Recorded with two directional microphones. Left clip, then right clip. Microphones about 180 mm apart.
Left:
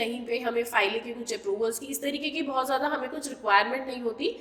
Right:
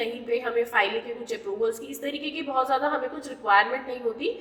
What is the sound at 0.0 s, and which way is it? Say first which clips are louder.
A woman's voice: right 2 dB; 40° left (ahead or behind).